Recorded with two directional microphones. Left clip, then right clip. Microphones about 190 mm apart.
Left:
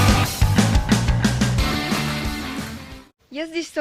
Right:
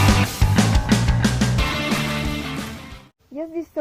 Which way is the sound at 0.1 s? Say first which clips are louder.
Even; centre (ahead or behind).